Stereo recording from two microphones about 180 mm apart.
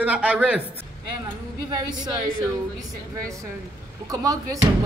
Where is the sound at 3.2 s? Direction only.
15° right (ahead or behind).